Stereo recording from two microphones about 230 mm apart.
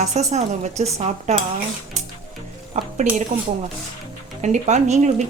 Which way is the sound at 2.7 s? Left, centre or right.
Right.